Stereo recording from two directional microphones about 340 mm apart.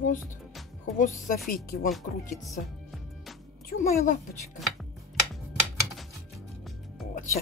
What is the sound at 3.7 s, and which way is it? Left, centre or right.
Speech, left.